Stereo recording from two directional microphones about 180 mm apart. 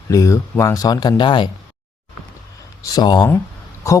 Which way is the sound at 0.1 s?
15° left (ahead or behind).